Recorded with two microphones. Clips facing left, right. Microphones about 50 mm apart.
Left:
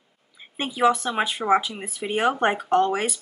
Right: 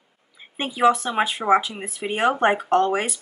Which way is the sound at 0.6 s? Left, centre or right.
Centre.